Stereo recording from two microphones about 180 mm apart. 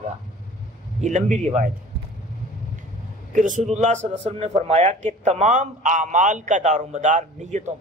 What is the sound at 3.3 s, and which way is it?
Speech, 45° right (ahead or behind).